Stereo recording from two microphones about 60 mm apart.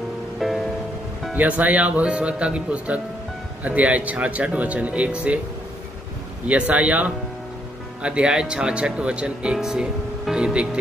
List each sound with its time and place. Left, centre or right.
0.4 s music: centre
1.3 s speech: right
6.4 s speech: right